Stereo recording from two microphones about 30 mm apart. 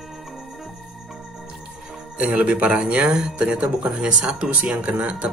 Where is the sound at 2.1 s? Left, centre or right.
Right.